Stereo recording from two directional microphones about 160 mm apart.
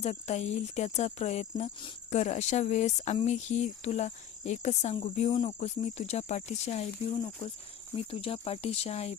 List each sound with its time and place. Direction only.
0.0 s speech: 45° left (ahead or behind)
7.9 s speech: 35° left (ahead or behind)